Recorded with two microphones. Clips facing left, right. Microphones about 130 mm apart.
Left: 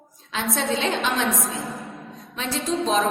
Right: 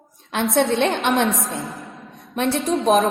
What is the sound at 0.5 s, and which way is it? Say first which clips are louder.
Speech: right 6 dB; 60° right (ahead or behind).